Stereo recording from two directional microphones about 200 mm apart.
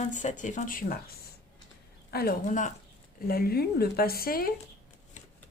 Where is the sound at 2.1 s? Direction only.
50° left (ahead or behind).